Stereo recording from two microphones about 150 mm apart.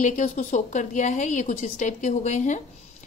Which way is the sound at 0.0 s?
55° left (ahead or behind).